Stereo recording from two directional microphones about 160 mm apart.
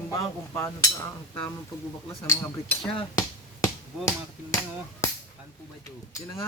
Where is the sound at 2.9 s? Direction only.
30° left (ahead or behind).